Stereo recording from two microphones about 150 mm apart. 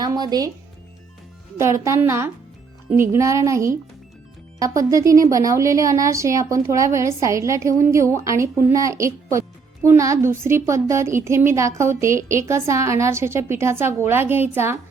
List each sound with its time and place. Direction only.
0.0 s a woman's voice: 25° right (ahead or behind)
1.5 s a woman's voice: 20° right (ahead or behind)